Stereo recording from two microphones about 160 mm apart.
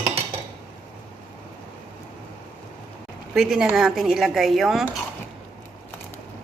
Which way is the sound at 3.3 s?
Centre (ahead or behind).